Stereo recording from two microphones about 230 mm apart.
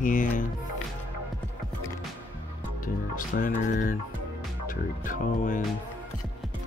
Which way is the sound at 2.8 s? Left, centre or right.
Left.